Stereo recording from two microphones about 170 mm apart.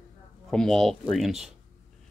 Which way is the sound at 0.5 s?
5° left (ahead or behind).